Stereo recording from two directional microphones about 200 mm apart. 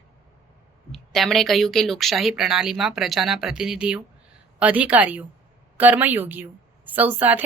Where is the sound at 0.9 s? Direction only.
Centre (ahead or behind).